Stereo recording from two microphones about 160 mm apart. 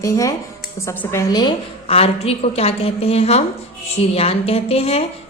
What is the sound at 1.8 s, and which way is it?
A woman's voice, 40° left (ahead or behind).